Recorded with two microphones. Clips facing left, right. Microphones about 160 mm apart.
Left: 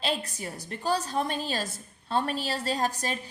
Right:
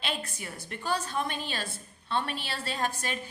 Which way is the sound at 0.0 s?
35° left (ahead or behind).